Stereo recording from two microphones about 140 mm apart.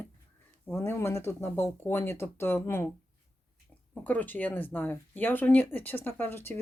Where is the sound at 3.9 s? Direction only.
10° left (ahead or behind).